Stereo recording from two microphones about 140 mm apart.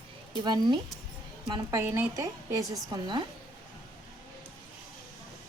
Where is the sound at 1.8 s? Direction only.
20° right (ahead or behind).